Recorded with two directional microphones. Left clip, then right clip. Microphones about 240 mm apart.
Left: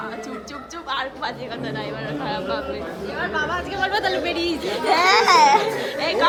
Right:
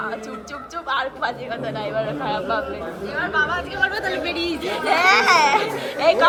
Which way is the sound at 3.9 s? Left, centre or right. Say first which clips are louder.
Left 2 dB; centre.